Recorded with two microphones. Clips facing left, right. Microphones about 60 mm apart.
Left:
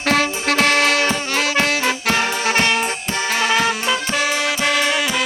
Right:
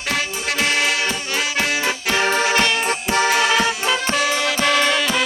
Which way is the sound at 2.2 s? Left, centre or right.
Right.